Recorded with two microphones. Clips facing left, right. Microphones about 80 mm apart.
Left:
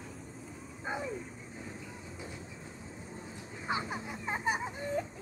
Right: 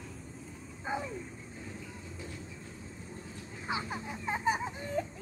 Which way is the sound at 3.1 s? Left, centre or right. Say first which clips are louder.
Even; centre.